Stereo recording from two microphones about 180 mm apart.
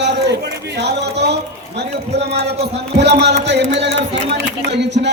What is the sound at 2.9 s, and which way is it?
A man's voice, 70° right (ahead or behind).